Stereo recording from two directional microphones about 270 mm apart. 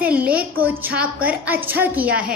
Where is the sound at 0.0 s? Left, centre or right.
Centre.